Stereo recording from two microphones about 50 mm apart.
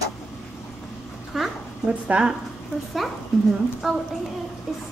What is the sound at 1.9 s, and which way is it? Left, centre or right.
Speech, right.